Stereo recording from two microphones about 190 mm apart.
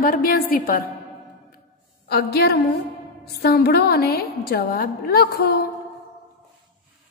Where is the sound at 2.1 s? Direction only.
55° left (ahead or behind).